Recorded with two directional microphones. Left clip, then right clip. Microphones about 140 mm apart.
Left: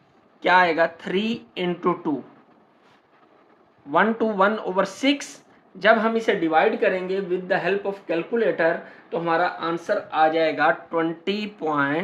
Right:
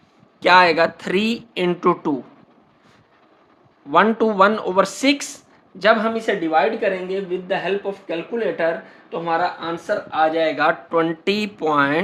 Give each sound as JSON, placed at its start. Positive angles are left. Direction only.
{"t": 0.3, "sound": "speech", "side_deg": -45}
{"t": 3.9, "sound": "speech", "side_deg": -40}
{"t": 6.0, "sound": "speech", "side_deg": -10}
{"t": 10.8, "sound": "speech", "side_deg": -45}